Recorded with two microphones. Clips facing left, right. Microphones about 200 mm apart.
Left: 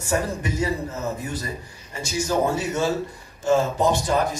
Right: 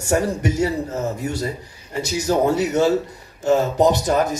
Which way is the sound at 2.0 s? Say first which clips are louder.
Right 4 dB; 65° right (ahead or behind).